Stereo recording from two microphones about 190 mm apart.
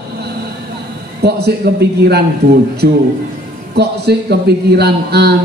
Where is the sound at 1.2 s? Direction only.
60° right (ahead or behind).